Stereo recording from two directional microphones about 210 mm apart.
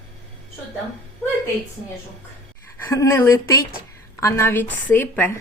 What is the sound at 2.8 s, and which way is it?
A woman's voice, 15° left (ahead or behind).